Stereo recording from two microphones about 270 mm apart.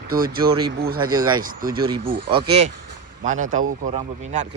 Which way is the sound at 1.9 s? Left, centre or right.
Centre.